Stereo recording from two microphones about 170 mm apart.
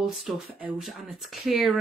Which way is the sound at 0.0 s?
Centre (ahead or behind).